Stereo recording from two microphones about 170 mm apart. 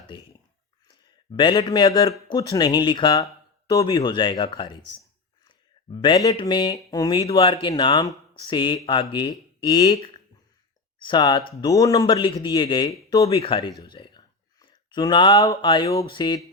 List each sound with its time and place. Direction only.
0.9 s speech: 30° left (ahead or behind)
7.2 s speech: 30° left (ahead or behind)
11.0 s speech: 25° left (ahead or behind)